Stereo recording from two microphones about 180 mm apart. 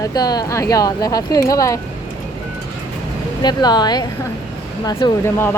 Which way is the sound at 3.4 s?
25° left (ahead or behind).